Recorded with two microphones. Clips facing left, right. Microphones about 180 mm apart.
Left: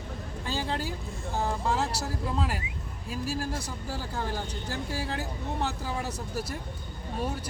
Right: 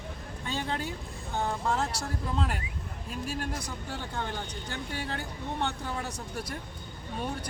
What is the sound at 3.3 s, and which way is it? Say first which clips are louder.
Speech: even; 30° left (ahead or behind).